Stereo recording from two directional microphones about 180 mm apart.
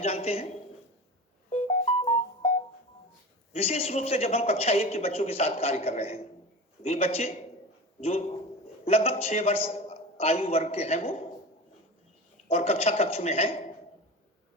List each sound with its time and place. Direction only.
0.0 s speech: 35° left (ahead or behind)
1.5 s music: 40° left (ahead or behind)
3.5 s speech: 35° left (ahead or behind)
8.8 s a man's voice: 35° left (ahead or behind)
12.5 s speech: 35° left (ahead or behind)